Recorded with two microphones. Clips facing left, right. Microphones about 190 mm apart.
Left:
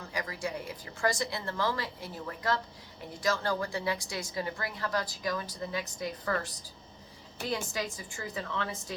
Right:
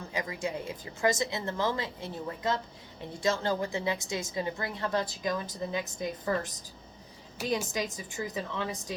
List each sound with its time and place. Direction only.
0.1 s a woman's voice: 20° right (ahead or behind)
7.7 s a woman's voice: 20° right (ahead or behind)